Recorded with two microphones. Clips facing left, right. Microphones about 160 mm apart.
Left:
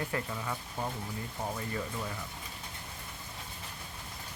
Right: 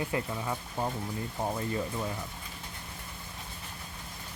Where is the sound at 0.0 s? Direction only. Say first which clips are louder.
Right 3 dB; 20° right (ahead or behind).